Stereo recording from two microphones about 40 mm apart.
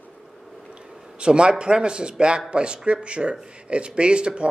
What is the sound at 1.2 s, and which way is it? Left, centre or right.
Speech, right.